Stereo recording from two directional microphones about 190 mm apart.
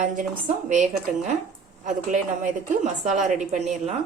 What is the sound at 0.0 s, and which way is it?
Speech, 40° right (ahead or behind).